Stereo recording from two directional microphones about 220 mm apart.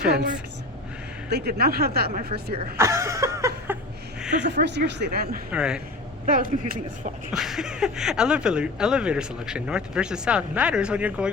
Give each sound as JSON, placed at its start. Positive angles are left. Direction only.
{"t": 0.1, "sound": "speech", "side_deg": -50}
{"t": 2.7, "sound": "a sound", "side_deg": -15}
{"t": 4.6, "sound": "speech", "side_deg": -50}
{"t": 5.5, "sound": "speech", "side_deg": -5}
{"t": 6.2, "sound": "speech", "side_deg": -40}
{"t": 7.3, "sound": "speech", "side_deg": 0}